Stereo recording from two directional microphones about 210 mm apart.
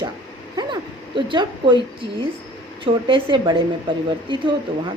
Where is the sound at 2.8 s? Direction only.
25° right (ahead or behind).